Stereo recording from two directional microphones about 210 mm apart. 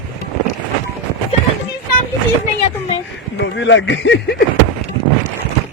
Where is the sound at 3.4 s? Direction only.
60° left (ahead or behind).